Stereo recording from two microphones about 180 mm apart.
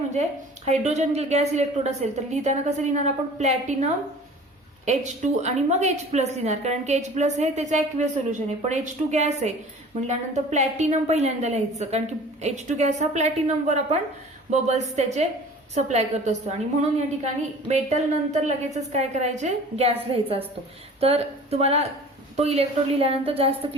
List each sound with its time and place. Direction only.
0.1 s a woman's voice: 40° right (ahead or behind)
4.9 s a woman's voice: 40° right (ahead or behind)
17.7 s a woman's voice: 40° right (ahead or behind)